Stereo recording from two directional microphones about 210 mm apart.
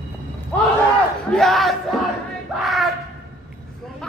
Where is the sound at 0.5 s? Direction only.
10° left (ahead or behind).